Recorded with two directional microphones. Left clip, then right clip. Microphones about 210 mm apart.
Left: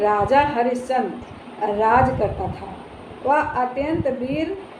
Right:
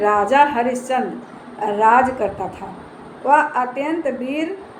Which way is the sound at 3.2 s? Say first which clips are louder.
Right 4 dB; 15° right (ahead or behind).